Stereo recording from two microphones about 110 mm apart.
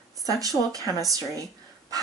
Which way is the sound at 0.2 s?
35° right (ahead or behind).